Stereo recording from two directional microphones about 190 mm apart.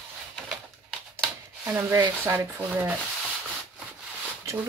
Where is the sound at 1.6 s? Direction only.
15° right (ahead or behind).